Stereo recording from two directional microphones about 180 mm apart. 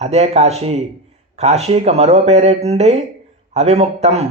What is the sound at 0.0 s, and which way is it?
A man's voice, 35° right (ahead or behind).